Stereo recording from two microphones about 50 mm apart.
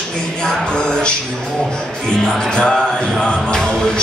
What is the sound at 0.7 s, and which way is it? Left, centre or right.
Music, centre.